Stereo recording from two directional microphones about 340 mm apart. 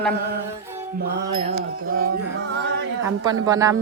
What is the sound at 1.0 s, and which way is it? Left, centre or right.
Mantra, right.